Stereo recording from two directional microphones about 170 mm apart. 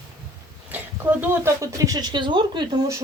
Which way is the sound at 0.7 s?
10° right (ahead or behind).